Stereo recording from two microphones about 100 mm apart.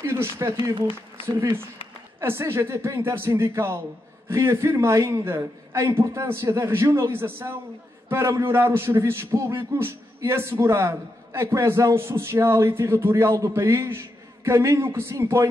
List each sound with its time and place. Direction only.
0.0 s speech: 25° right (ahead or behind)
2.1 s speech: 25° right (ahead or behind)